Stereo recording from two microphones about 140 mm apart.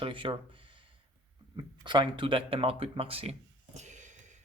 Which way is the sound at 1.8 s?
35° right (ahead or behind).